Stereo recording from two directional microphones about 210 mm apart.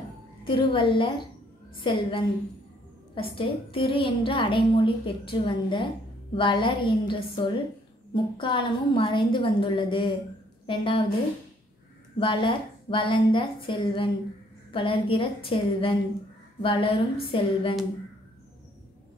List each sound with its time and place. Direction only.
0.4 s a woman's voice: 25° left (ahead or behind)
12.2 s a woman's voice: 25° left (ahead or behind)